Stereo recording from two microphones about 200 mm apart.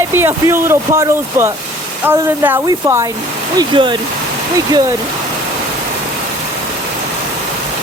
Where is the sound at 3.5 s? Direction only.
25° right (ahead or behind).